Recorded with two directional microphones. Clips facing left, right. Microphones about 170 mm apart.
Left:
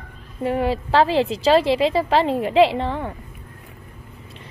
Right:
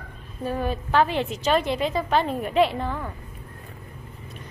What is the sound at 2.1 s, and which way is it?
Speech, 90° left.